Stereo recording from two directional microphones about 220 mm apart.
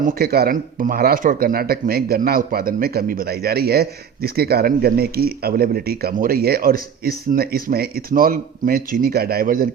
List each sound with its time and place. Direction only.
0.0 s speech: 40° right (ahead or behind)